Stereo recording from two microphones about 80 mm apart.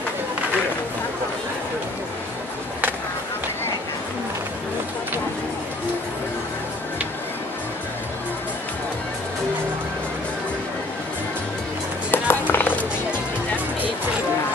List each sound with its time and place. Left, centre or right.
12.1 s music: left